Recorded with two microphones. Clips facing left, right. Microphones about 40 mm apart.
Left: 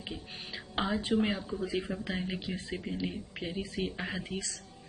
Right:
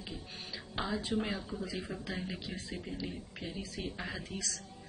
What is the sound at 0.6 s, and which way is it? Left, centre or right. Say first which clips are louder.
Speech: left 4 dB; left.